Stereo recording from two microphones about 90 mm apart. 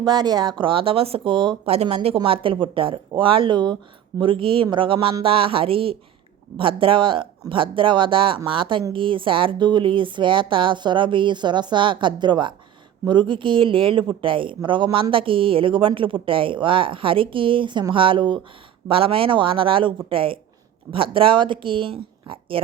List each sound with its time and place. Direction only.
0.0 s speech: 55° right (ahead or behind)
0.6 s speech: 80° right; by 3.8 s 60° right (ahead or behind)
4.2 s a woman's voice: 75° right (ahead or behind)
5.2 s speech: 90° right
6.6 s a woman's voice: 75° right (ahead or behind)
15.1 s a woman's voice: 80° right
18.9 s a woman's voice: 90° right